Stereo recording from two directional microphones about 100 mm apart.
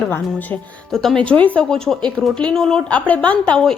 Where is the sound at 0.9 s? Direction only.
5° left (ahead or behind).